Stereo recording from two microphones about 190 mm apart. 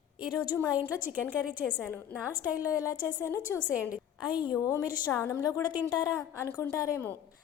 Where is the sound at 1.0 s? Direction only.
10° right (ahead or behind).